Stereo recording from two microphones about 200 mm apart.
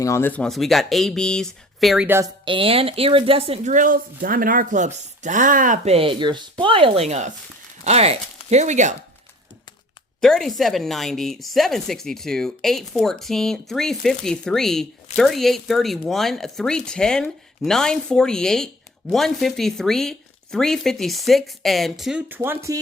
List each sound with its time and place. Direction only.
0.0 s speech: 10° left (ahead or behind)
2.0 s a woman's voice: 10° right (ahead or behind)
2.4 s speech: 25° right (ahead or behind)
10.2 s speech: centre (ahead or behind); by 22.8 s 15° right (ahead or behind)